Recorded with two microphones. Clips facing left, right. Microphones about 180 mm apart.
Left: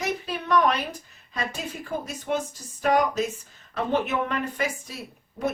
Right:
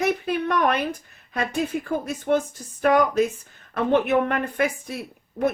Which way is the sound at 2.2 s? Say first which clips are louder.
Right 7 dB; 55° right (ahead or behind).